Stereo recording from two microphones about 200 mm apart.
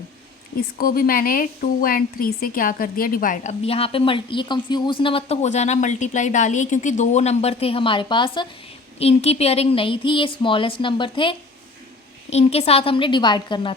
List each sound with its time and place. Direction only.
0.5 s a woman's voice: 45° left (ahead or behind); by 13.7 s 25° left (ahead or behind)